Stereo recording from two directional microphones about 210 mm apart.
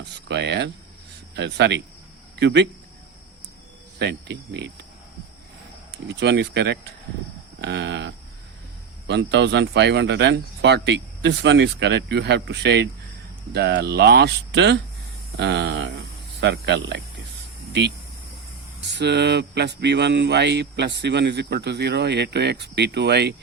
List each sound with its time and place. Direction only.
0.0 s a sound: 55° right (ahead or behind)
1.4 s speech: 55° right (ahead or behind)
3.9 s speech: 55° right (ahead or behind)
6.1 s speech: 55° right (ahead or behind)
18.8 s speech: 55° right (ahead or behind)